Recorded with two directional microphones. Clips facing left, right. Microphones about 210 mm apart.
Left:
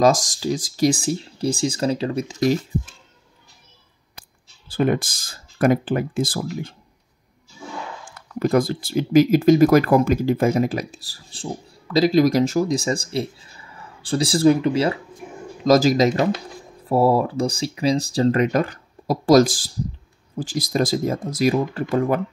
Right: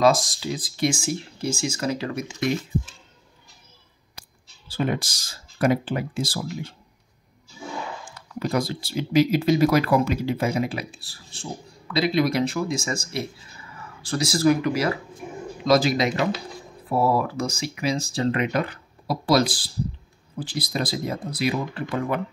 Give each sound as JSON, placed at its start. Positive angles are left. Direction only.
{"t": 0.0, "sound": "speech", "side_deg": 45}
{"t": 4.6, "sound": "speech", "side_deg": 55}
{"t": 8.4, "sound": "speech", "side_deg": 50}
{"t": 15.6, "sound": "speech", "side_deg": 40}